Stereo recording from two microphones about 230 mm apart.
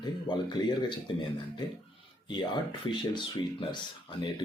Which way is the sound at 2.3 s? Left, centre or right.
Centre.